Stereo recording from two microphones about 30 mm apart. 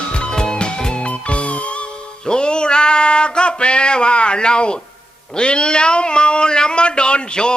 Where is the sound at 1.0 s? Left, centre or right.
Left.